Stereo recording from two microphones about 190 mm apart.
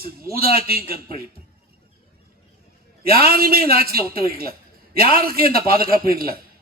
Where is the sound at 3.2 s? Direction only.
50° right (ahead or behind).